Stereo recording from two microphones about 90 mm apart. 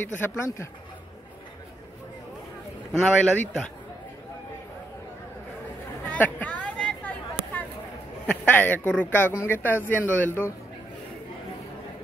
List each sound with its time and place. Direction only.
0.0 s speech: 25° left (ahead or behind)
3.0 s speech: 5° left (ahead or behind)
6.0 s a sound: 15° left (ahead or behind)
8.3 s speech: 20° left (ahead or behind)